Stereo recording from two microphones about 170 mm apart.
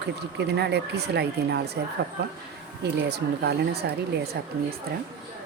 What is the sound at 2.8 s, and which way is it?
Speech, 80° right.